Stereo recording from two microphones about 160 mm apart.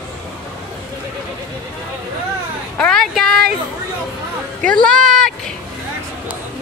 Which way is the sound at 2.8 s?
5° left (ahead or behind).